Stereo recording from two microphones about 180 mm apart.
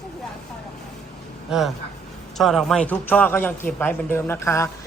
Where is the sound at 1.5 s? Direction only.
Centre (ahead or behind).